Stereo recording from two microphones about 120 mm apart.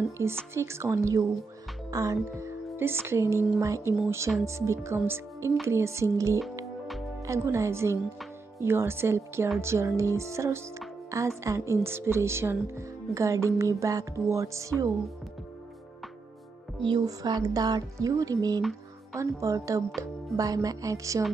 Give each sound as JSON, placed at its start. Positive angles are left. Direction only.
{"t": 0.2, "sound": "speech", "side_deg": -25}
{"t": 1.9, "sound": "music", "side_deg": -30}
{"t": 3.5, "sound": "speech", "side_deg": -25}
{"t": 17.0, "sound": "speech", "side_deg": -30}